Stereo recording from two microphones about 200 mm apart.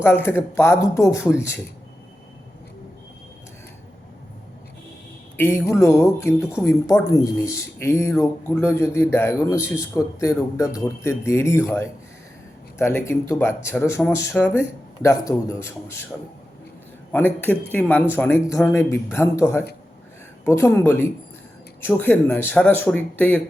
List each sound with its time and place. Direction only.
0.0 s speech: 10° left (ahead or behind)
5.4 s speech: 10° left (ahead or behind)
17.1 s speech: 10° left (ahead or behind)